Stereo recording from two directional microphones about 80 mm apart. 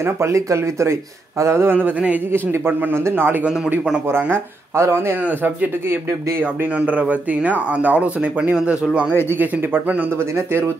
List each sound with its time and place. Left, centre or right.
0.0 s a man's voice: right
3.4 s speech: centre
4.7 s speech: right
5.2 s a man's voice: right
9.3 s a man's voice: right